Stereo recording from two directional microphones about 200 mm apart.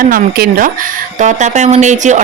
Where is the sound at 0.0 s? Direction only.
45° right (ahead or behind).